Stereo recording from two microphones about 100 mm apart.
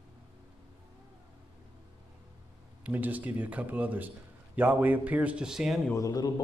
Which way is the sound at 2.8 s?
15° right (ahead or behind).